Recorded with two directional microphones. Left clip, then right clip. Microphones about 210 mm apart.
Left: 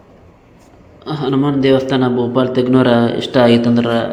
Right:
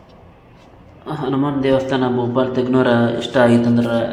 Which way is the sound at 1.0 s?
25° left (ahead or behind).